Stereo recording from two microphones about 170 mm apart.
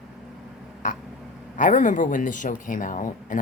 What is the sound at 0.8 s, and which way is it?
Speech, 50° left (ahead or behind).